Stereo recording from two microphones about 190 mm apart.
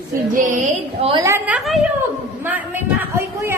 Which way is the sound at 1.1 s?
15° right (ahead or behind).